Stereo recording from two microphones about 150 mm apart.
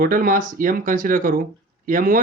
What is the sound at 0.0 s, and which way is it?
Speech, 65° right (ahead or behind).